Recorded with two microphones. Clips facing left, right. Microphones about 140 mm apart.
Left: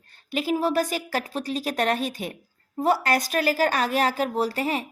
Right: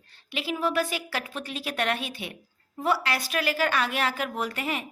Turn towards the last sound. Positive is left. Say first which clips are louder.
# left 5 dB
turn(degrees=35)  # may be behind; listen again after turning